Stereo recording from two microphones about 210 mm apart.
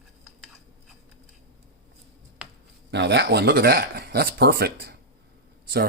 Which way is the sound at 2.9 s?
55° right (ahead or behind).